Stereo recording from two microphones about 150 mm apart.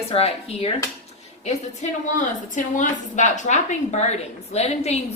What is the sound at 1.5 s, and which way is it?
A woman's voice, 55° left (ahead or behind).